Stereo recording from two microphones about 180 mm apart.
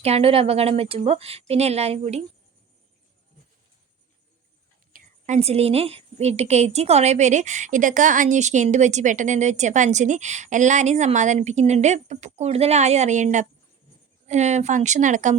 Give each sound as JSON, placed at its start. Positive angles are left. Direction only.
{"t": 0.0, "sound": "a woman's voice", "side_deg": -35}
{"t": 4.9, "sound": "a woman's voice", "side_deg": -40}